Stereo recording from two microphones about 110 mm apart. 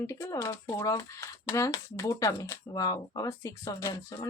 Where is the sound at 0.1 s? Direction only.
25° left (ahead or behind).